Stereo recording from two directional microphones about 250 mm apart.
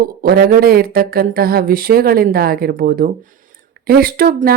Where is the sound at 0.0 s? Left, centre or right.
Right.